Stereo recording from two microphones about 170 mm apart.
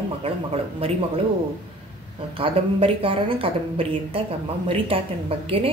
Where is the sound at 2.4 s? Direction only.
35° right (ahead or behind).